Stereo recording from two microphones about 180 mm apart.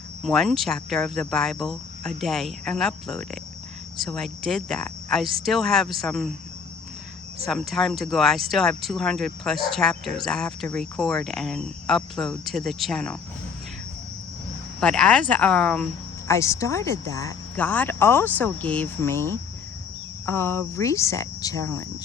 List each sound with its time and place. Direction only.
0.2 s speech: centre (ahead or behind)
7.4 s speech: centre (ahead or behind)
14.8 s speech: 5° left (ahead or behind)
16.2 s speech: 15° left (ahead or behind)